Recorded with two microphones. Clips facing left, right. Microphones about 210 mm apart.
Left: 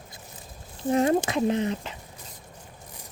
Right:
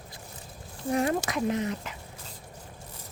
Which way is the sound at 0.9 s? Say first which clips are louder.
Left 5 dB; 25° left (ahead or behind).